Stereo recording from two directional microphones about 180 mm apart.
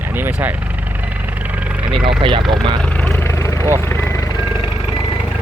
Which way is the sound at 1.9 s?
30° right (ahead or behind).